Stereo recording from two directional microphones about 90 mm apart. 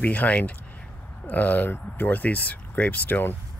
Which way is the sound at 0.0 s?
15° left (ahead or behind).